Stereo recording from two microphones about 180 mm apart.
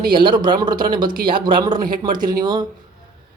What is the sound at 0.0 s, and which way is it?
Speech, 25° right (ahead or behind).